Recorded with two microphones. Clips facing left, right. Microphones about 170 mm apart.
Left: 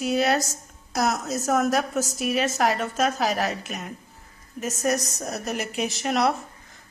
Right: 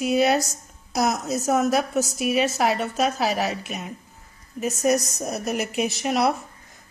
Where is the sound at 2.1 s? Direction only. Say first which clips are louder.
Right 2 dB; 40° left (ahead or behind).